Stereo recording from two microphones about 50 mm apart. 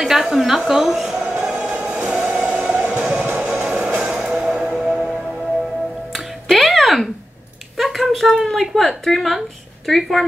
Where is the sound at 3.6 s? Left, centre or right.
Centre.